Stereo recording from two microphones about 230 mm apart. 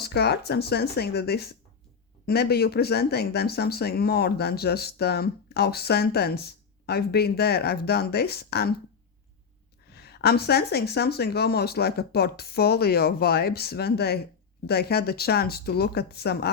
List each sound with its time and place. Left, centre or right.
0.0 s speech: left
9.9 s speech: left